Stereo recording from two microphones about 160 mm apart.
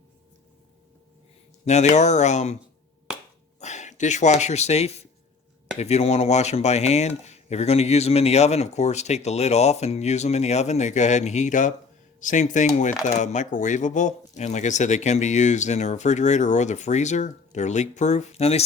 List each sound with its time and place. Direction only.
1.6 s speech: 45° left (ahead or behind)
3.1 s finger snapping: 5° right (ahead or behind)
3.6 s speech: 45° left (ahead or behind)